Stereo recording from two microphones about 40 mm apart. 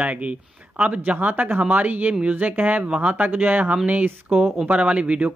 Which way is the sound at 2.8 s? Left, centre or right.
Right.